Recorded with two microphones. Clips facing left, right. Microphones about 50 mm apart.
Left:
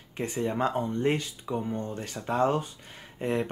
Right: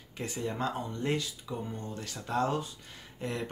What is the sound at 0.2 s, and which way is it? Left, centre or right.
Speech, left.